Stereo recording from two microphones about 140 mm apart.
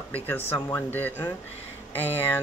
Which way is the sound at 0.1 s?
15° left (ahead or behind).